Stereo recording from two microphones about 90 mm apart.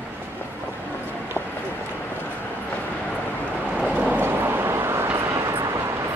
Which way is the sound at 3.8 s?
15° right (ahead or behind).